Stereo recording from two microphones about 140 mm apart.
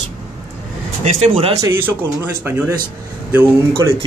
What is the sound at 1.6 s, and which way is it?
Speech, 15° right (ahead or behind).